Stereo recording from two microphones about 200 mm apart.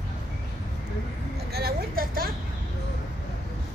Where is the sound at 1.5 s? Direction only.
50° right (ahead or behind).